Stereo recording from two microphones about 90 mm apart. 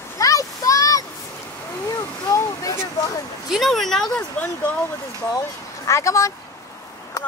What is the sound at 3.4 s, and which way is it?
Speech, centre (ahead or behind).